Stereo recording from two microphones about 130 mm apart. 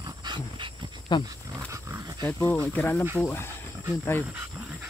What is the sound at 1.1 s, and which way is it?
Speech, 35° left (ahead or behind).